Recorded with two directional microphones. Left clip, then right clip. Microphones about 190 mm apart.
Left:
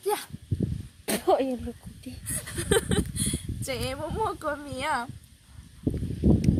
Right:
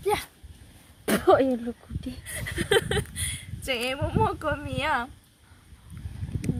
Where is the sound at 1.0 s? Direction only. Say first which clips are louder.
Right 4 dB; 20° right (ahead or behind).